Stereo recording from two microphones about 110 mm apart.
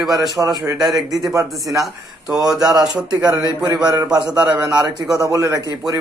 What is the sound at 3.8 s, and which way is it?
Speech, 40° right (ahead or behind).